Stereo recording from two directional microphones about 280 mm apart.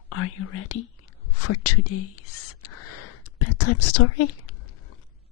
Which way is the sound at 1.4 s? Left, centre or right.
Left.